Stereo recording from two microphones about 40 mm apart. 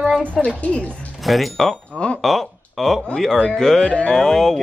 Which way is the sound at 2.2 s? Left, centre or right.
Centre.